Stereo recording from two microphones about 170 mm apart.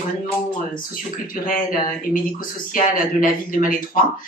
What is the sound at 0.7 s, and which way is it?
Speech, 55° left (ahead or behind).